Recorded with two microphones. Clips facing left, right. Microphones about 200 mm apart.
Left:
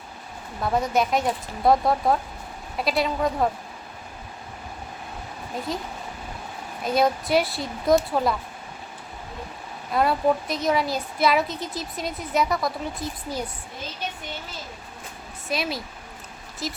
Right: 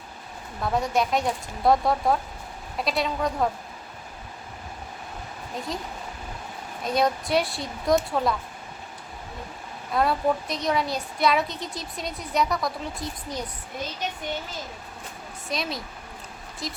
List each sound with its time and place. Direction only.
0.6 s speech: centre (ahead or behind)
5.7 s speech: centre (ahead or behind)
9.9 s speech: centre (ahead or behind)
15.4 s speech: 5° left (ahead or behind)